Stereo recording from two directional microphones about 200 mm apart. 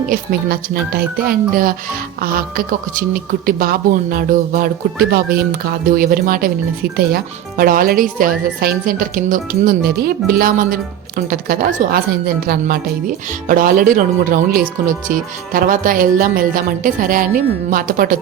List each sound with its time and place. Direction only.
0.1 s speech: 50° right (ahead or behind)